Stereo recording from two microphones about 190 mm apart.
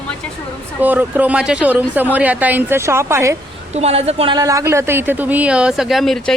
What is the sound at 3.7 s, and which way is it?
A woman's voice, 35° right (ahead or behind).